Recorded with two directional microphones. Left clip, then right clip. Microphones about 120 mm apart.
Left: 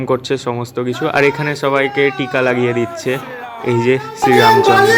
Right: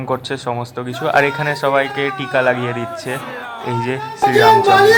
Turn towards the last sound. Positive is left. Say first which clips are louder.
# left 1 dB
turn(degrees=30)  # may be behind; listen again after turning